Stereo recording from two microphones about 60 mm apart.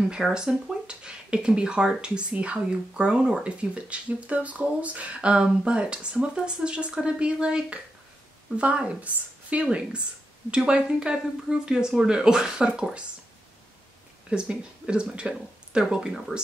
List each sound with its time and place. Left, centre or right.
0.3 s speech: centre
14.3 s speech: centre